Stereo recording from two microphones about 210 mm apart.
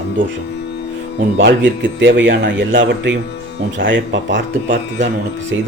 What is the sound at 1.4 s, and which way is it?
A man's voice, 55° right (ahead or behind).